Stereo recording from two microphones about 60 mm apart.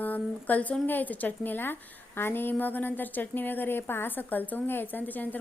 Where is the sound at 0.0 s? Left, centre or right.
Left.